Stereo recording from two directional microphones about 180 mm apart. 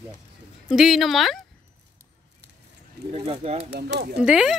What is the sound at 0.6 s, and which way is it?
Speech, centre (ahead or behind).